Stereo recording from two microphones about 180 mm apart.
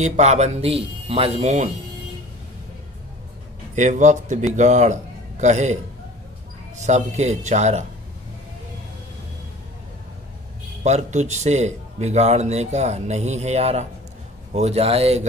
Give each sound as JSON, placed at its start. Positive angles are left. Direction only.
{"t": 0.0, "sound": "speech", "side_deg": -40}
{"t": 3.7, "sound": "speech", "side_deg": -40}
{"t": 6.8, "sound": "speech", "side_deg": -40}
{"t": 10.8, "sound": "speech", "side_deg": -40}